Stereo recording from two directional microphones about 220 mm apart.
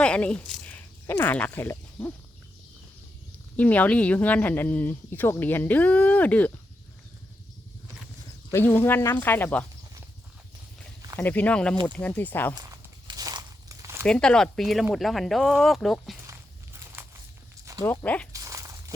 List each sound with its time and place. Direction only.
0.0 s speech: 5° left (ahead or behind)
3.6 s speech: 5° left (ahead or behind)
8.4 s speech: 10° left (ahead or behind)
11.2 s speech: 10° left (ahead or behind)
12.5 s walk: 20° right (ahead or behind)
14.0 s speech: 5° left (ahead or behind)
17.0 s crumpling: 10° right (ahead or behind)
17.7 s a sound: 15° right (ahead or behind)
18.0 s speech: 5° left (ahead or behind)
18.3 s crumpling: 15° right (ahead or behind)